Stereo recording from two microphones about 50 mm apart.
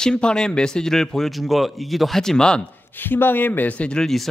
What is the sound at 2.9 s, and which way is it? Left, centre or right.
Speech, left.